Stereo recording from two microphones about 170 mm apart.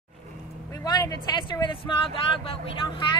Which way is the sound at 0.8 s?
25° left (ahead or behind).